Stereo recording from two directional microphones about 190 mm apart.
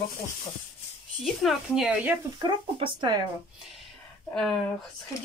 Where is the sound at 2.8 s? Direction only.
25° right (ahead or behind).